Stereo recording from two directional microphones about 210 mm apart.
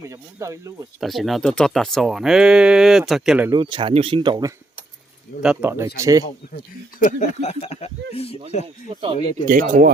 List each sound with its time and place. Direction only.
0.1 s speech: 15° right (ahead or behind)
0.9 s speech: centre (ahead or behind)
3.5 s speech: 25° right (ahead or behind)
5.4 s speech: 5° right (ahead or behind)
7.0 s speech: 35° left (ahead or behind)
8.6 s speech: 25° right (ahead or behind)
9.5 s speech: 40° right (ahead or behind)